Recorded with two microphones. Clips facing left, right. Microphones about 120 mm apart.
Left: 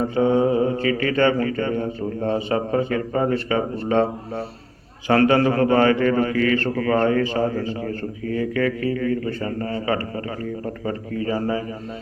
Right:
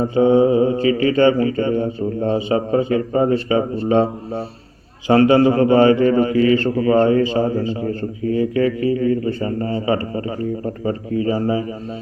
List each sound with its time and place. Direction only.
0.1 s mantra: 15° right (ahead or behind)
1.0 s a man's voice: 20° right (ahead or behind)
5.0 s a man's voice: 20° right (ahead or behind)